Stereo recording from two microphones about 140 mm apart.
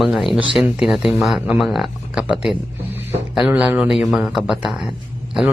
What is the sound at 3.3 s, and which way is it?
A man's voice, 5° right (ahead or behind).